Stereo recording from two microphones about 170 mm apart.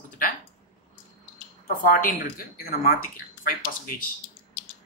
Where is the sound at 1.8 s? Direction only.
55° left (ahead or behind).